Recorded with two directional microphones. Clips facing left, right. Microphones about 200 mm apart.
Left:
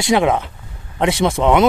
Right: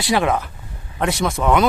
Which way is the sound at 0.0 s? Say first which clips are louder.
Left 3 dB; 20° left (ahead or behind).